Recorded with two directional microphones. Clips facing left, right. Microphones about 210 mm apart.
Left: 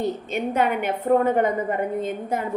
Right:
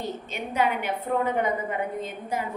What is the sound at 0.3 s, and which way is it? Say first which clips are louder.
A woman's voice: left 2 dB; 50° left (ahead or behind).